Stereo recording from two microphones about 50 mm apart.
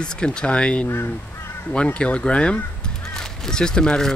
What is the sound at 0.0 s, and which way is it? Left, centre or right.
Speech, centre.